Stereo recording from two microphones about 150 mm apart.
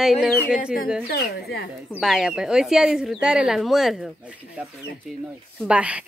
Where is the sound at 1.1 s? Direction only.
90° left.